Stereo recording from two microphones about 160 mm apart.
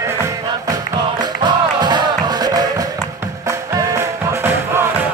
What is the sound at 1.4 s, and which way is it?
Music, 25° right (ahead or behind).